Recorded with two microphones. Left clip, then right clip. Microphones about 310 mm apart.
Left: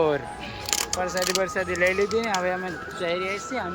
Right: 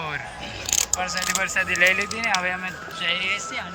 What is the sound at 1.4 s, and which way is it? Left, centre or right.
Speech, centre.